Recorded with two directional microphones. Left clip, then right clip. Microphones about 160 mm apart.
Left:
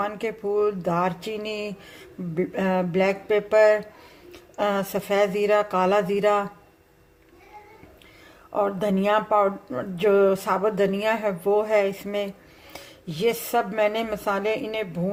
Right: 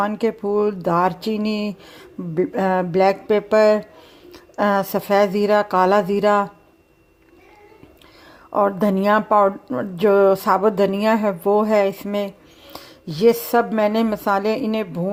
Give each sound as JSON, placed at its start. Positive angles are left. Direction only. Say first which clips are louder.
{"t": 0.0, "sound": "speech", "louder": "right 6 dB", "side_deg": -40}
{"t": 8.5, "sound": "speech", "louder": "right 5 dB", "side_deg": -40}